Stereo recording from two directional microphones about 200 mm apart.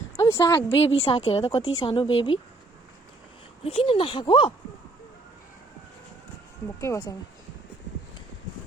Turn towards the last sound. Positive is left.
turn(degrees=15)  # may be behind; listen again after turning